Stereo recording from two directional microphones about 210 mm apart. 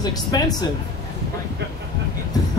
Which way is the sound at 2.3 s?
15° left (ahead or behind).